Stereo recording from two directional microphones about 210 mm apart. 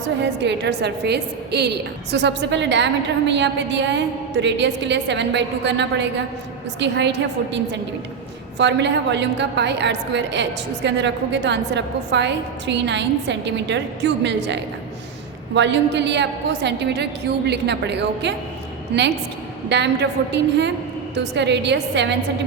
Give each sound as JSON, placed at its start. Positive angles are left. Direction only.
{"t": 0.2, "sound": "a woman's voice", "side_deg": -55}
{"t": 19.6, "sound": "a woman's voice", "side_deg": -55}